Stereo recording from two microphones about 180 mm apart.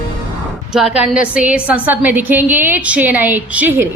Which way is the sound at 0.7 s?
5° right (ahead or behind).